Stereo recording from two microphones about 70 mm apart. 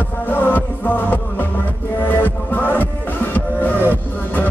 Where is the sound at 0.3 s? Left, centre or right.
Left.